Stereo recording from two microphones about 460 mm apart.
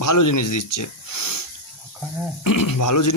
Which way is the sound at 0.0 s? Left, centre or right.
Left.